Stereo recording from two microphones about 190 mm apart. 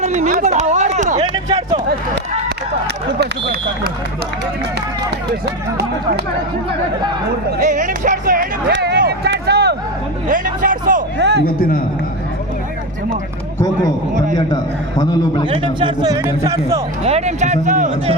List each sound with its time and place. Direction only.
0.0 s a sound: 35° right (ahead or behind)
0.3 s speech: 40° right (ahead or behind)
1.1 s speech: 20° right (ahead or behind)
2.8 s speech: 60° right (ahead or behind)
7.6 s speech: 40° right (ahead or behind)
8.7 s a sound: 60° right (ahead or behind)
10.2 s hubbub: 45° right (ahead or behind)
11.2 s music: 65° right (ahead or behind)
11.4 s a man's voice: 50° left (ahead or behind)
14.3 s a man's voice: 20° left (ahead or behind)
15.4 s speech: 25° right (ahead or behind)
17.0 s speech: 35° right (ahead or behind)